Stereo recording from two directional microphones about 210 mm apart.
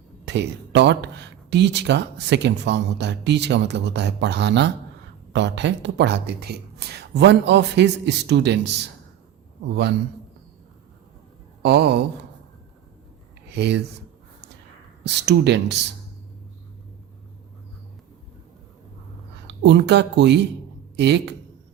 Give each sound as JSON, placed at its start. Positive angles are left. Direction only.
{"t": 0.3, "sound": "speech", "side_deg": -55}
{"t": 11.6, "sound": "speech", "side_deg": -50}
{"t": 13.5, "sound": "speech", "side_deg": -55}
{"t": 15.0, "sound": "speech", "side_deg": -55}
{"t": 19.5, "sound": "speech", "side_deg": -55}